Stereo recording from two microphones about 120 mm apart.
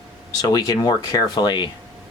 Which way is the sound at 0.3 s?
30° left (ahead or behind).